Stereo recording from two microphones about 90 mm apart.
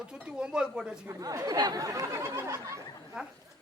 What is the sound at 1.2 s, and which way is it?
Speech, 40° right (ahead or behind).